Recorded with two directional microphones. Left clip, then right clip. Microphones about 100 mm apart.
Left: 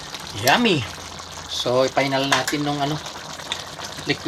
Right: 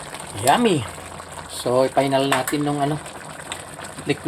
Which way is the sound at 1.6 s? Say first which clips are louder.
Right 1 dB; 40° right (ahead or behind).